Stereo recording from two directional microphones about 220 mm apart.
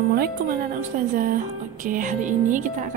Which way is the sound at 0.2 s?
40° right (ahead or behind).